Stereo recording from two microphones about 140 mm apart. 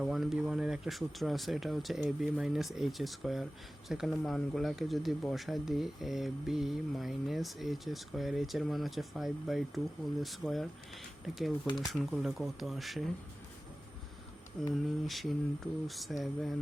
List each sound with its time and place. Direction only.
0.0 s speech: centre (ahead or behind)
11.6 s speech: 30° left (ahead or behind)
11.9 s speech: centre (ahead or behind)
15.0 s speech: centre (ahead or behind)